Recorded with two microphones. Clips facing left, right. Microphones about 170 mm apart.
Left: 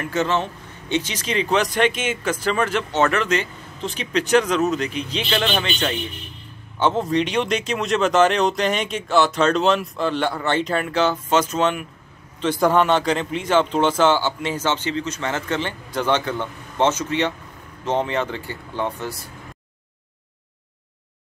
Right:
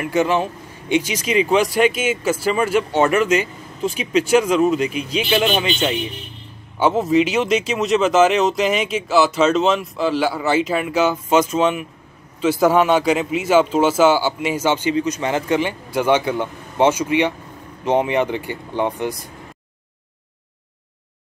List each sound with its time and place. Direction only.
0.0 s speech: 10° right (ahead or behind)